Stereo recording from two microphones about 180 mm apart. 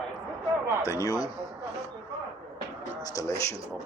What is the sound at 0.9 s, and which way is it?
Speech, 20° left (ahead or behind).